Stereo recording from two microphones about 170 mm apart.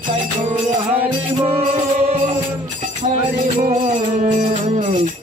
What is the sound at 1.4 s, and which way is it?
Music, 35° right (ahead or behind).